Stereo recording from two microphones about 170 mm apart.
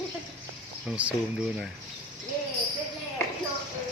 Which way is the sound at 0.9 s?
5° right (ahead or behind).